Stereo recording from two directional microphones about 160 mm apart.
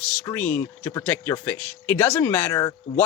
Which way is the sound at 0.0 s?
10° left (ahead or behind).